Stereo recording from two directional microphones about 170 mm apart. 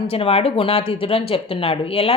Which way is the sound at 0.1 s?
35° left (ahead or behind).